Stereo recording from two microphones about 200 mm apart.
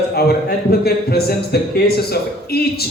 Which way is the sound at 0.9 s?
50° left (ahead or behind).